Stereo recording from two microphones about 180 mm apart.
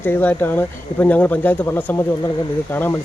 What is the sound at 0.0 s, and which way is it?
Speech, 10° left (ahead or behind).